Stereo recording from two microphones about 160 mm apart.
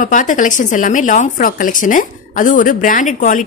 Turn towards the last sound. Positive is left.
turn(degrees=50)  # may be behind; listen again after turning